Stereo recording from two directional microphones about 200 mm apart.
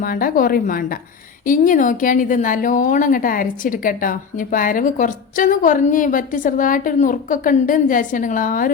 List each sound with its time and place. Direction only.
0.0 s a woman's voice: 45° left (ahead or behind)